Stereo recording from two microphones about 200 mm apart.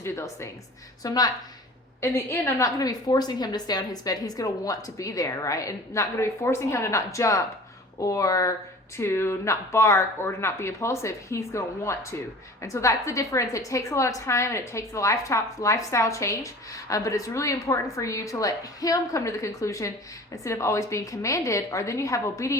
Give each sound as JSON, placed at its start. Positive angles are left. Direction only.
{"t": 0.0, "sound": "a woman's voice", "side_deg": 15}